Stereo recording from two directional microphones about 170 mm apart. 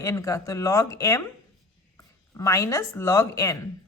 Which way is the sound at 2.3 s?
20° left (ahead or behind).